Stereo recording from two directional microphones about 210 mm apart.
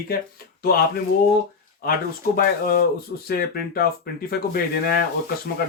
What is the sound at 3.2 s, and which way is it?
Speech, 45° left (ahead or behind).